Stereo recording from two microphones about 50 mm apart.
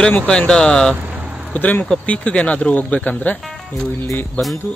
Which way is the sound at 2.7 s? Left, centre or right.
Left.